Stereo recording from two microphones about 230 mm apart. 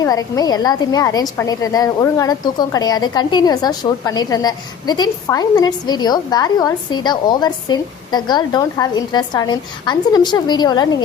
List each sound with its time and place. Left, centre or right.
0.0 s a woman's voice: centre